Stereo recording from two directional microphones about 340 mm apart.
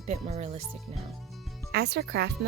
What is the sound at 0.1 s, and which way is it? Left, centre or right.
Speech, centre.